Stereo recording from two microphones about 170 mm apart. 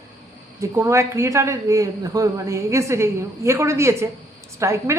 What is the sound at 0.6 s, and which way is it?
A man's voice, 15° right (ahead or behind).